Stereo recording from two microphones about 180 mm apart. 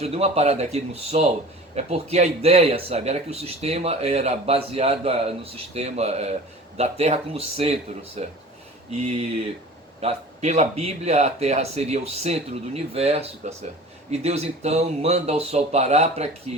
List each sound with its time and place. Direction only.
0.0 s speech: 35° right (ahead or behind)